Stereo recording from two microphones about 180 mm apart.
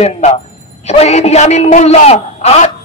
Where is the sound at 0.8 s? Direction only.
35° left (ahead or behind).